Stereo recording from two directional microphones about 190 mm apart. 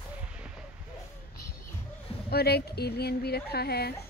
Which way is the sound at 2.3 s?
55° left (ahead or behind).